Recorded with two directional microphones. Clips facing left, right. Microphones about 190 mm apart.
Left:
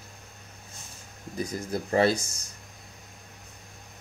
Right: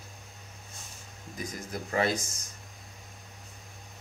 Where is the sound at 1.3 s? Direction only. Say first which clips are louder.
Left 6 dB; 30° left (ahead or behind).